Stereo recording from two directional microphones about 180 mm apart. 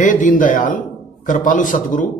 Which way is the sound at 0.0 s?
45° left (ahead or behind).